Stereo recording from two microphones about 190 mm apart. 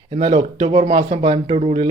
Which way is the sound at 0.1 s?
25° right (ahead or behind).